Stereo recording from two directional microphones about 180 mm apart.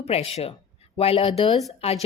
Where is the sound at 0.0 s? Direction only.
35° left (ahead or behind).